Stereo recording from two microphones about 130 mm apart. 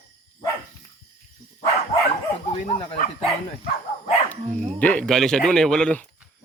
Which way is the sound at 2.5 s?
50° left (ahead or behind).